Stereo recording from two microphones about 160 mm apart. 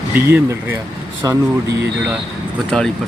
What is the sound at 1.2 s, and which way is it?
Speech, 25° right (ahead or behind).